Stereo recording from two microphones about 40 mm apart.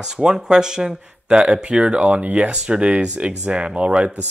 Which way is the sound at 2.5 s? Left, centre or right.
Right.